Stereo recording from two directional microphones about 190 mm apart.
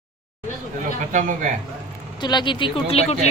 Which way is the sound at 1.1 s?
40° right (ahead or behind).